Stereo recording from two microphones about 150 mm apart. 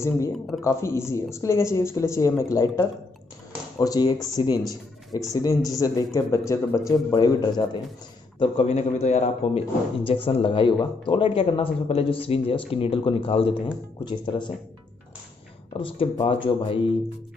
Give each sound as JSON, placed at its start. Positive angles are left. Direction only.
{"t": 0.7, "sound": "a woman's voice", "side_deg": 20}
{"t": 8.4, "sound": "speech", "side_deg": 40}
{"t": 15.8, "sound": "speech", "side_deg": 35}